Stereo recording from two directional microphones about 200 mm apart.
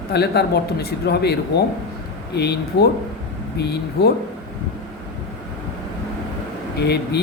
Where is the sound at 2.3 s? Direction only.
55° left (ahead or behind).